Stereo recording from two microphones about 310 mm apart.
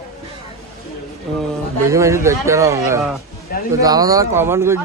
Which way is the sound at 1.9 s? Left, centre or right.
Centre.